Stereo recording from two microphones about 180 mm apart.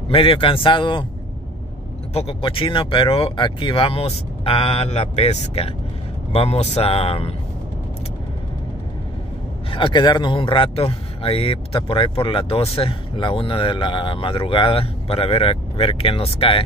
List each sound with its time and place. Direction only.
0.1 s speech: 30° left (ahead or behind)
2.1 s speech: 30° left (ahead or behind)
9.7 s speech: 30° left (ahead or behind)